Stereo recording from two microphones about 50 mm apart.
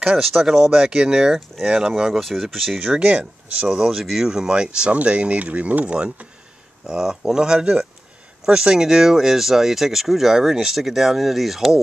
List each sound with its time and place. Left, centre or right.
0.0 s speech: centre
2.8 s speech: right
3.6 s speech: centre; by 5.9 s right
6.9 s speech: centre